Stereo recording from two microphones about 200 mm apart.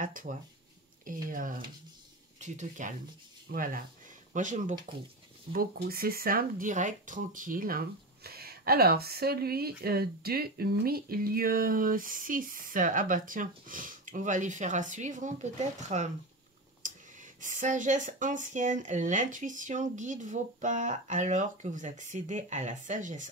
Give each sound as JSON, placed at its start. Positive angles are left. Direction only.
{"t": 0.0, "sound": "speech", "side_deg": -40}